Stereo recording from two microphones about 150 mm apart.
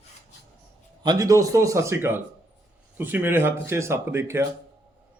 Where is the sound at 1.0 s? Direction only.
25° right (ahead or behind).